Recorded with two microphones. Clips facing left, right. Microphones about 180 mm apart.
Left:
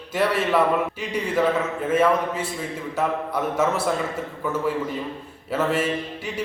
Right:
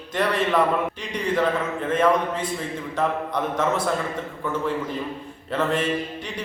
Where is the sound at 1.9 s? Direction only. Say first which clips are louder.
Even; 5° left (ahead or behind).